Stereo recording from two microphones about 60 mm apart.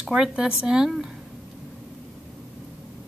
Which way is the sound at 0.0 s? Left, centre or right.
Centre.